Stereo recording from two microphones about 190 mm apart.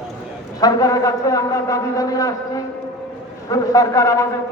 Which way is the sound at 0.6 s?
20° left (ahead or behind).